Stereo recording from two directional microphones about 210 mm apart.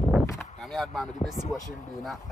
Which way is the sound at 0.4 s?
Centre (ahead or behind).